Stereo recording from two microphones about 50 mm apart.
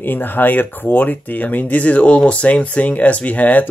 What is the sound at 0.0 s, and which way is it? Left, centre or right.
Speech, left.